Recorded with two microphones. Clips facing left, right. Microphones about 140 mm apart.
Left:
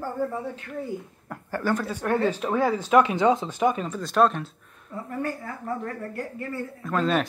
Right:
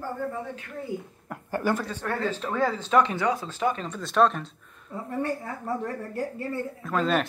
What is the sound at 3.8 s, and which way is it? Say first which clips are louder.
Speech: left 1 dB; centre (ahead or behind).